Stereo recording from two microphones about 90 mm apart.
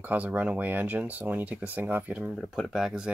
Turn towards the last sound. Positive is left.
turn(degrees=-5)  # may be behind; listen again after turning